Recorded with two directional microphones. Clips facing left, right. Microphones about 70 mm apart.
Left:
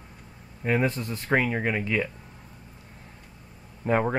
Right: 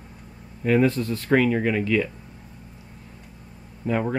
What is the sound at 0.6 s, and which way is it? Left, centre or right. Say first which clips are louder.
Speech: right 5 dB; centre.